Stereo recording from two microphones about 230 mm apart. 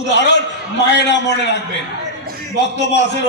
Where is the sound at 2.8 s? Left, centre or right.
Left.